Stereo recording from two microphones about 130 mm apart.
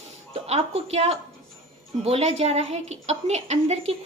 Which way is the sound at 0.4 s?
55° right (ahead or behind).